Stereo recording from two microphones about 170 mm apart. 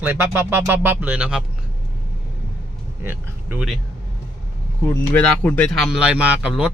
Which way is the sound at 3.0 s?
10° right (ahead or behind).